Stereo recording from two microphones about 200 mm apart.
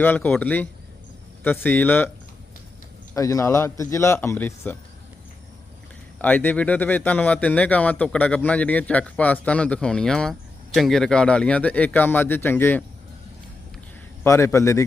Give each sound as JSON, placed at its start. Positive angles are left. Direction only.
{"t": 0.0, "sound": "a man's voice", "side_deg": 10}
{"t": 3.2, "sound": "a man's voice", "side_deg": 15}
{"t": 6.2, "sound": "a man's voice", "side_deg": 10}
{"t": 14.3, "sound": "a man's voice", "side_deg": 15}